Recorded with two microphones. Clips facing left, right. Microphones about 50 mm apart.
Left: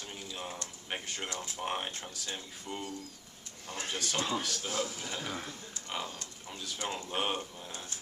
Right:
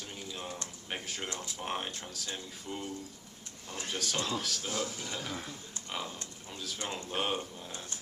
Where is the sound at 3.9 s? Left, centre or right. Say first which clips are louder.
Right 1 dB; centre.